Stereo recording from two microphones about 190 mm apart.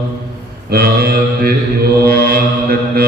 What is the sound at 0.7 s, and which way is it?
Mantra, 55° right (ahead or behind).